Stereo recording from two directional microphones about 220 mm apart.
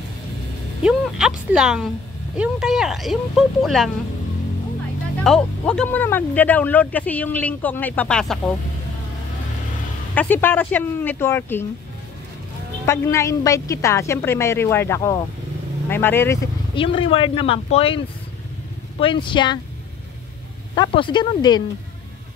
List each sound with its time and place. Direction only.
0.8 s speech: 5° right (ahead or behind)
5.2 s speech: 5° left (ahead or behind)
10.1 s speech: 10° left (ahead or behind)
12.8 s speech: 15° left (ahead or behind)
16.7 s speech: 25° left (ahead or behind)
20.7 s speech: 20° left (ahead or behind)